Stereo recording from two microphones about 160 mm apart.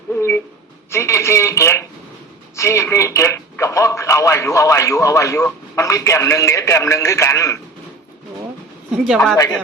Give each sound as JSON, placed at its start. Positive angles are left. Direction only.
{"t": 0.1, "sound": "a sound", "side_deg": 15}
{"t": 2.6, "sound": "speech", "side_deg": 15}
{"t": 9.0, "sound": "a woman's voice", "side_deg": 0}
{"t": 9.3, "sound": "speech", "side_deg": 15}